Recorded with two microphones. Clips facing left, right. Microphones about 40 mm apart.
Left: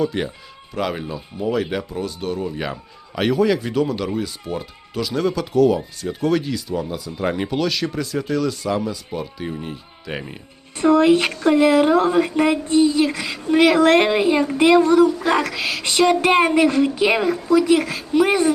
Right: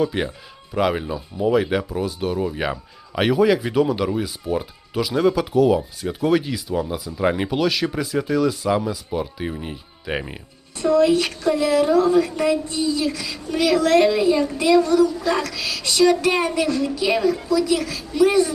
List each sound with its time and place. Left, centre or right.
0.0 s speech: centre
10.8 s speech: left